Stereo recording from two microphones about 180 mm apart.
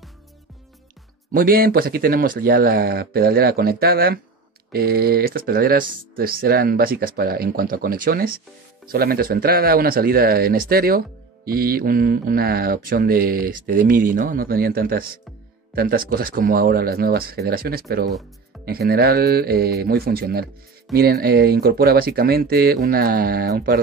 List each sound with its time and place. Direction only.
1.3 s speech: 55° right (ahead or behind)